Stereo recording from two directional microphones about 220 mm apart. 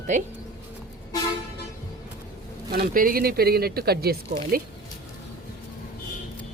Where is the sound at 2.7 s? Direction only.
40° right (ahead or behind).